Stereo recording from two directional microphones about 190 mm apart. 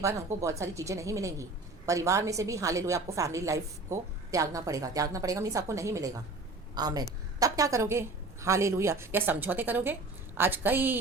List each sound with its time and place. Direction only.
0.0 s a woman's voice: 15° right (ahead or behind)